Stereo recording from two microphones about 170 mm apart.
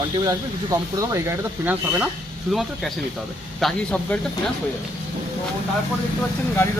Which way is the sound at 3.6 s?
5° left (ahead or behind).